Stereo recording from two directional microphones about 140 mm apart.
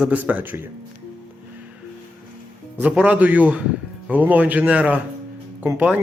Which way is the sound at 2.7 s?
10° right (ahead or behind).